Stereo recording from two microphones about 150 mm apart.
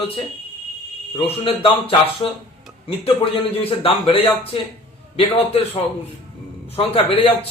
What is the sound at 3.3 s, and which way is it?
Speech, 40° left (ahead or behind).